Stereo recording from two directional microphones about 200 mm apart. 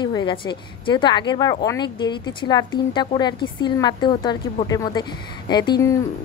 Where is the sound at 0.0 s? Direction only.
25° left (ahead or behind).